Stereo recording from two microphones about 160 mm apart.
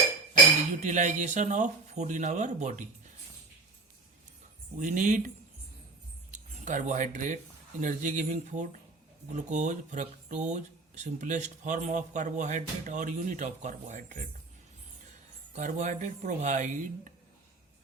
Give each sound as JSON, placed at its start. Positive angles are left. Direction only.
{"t": 0.9, "sound": "speech", "side_deg": -50}
{"t": 4.8, "sound": "speech", "side_deg": -55}
{"t": 6.3, "sound": "speech", "side_deg": -50}
{"t": 15.5, "sound": "speech", "side_deg": -50}